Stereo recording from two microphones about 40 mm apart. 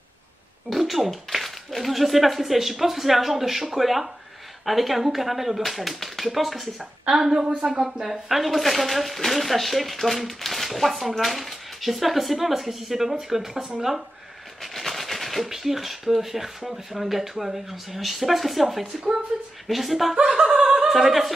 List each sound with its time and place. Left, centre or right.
0.7 s a woman's voice: centre
6.8 s speech: centre
14.6 s speech: centre
19.7 s speech: centre
20.2 s chuckle: right
20.4 s chuckle: centre
20.9 s speech: centre